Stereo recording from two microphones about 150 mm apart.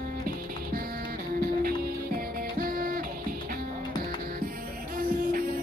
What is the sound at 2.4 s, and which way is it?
Music, 75° right (ahead or behind).